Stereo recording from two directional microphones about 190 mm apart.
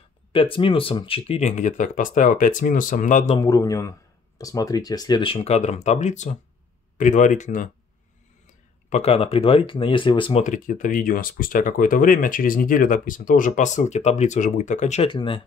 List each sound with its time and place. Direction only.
0.3 s speech: 30° left (ahead or behind)
3.3 s a man's voice: 20° left (ahead or behind); by 7.7 s 40° left (ahead or behind)
8.9 s speech: 30° left (ahead or behind)
10.4 s speech: 40° left (ahead or behind)
15.0 s speech: 25° left (ahead or behind)